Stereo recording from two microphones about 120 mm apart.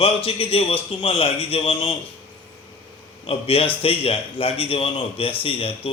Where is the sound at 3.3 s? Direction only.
55° left (ahead or behind).